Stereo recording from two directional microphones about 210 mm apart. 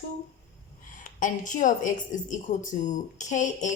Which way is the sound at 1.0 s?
40° left (ahead or behind).